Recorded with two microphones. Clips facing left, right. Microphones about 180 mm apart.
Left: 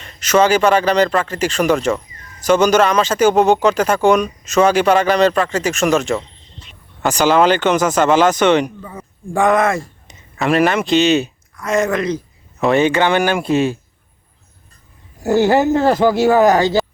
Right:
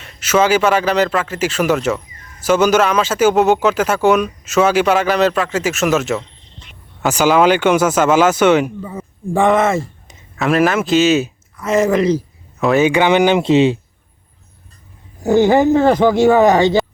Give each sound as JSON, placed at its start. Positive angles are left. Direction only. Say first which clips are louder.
{"t": 0.0, "sound": "speech", "louder": "left 1 dB", "side_deg": -5}
{"t": 12.9, "sound": "speech", "louder": "right 3 dB", "side_deg": -15}
{"t": 15.2, "sound": "speech", "louder": "right 2 dB", "side_deg": 5}